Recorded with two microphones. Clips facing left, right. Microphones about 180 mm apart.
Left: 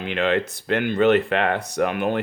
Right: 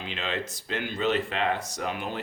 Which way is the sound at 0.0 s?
60° left (ahead or behind).